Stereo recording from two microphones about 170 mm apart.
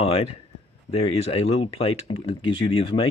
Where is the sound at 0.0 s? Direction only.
35° left (ahead or behind).